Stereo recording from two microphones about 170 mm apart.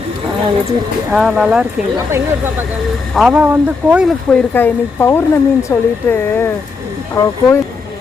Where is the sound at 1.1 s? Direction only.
Centre (ahead or behind).